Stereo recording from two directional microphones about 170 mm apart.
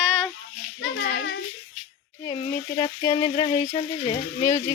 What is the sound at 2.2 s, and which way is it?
Frying, 20° left (ahead or behind).